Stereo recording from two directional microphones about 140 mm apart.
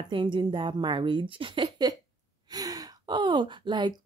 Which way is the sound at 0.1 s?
35° right (ahead or behind).